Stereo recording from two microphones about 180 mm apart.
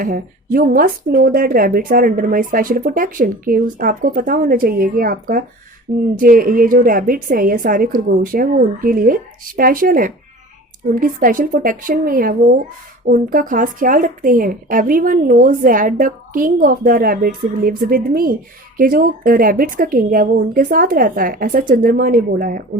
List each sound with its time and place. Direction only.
0.0 s a woman's voice: 50° right (ahead or behind)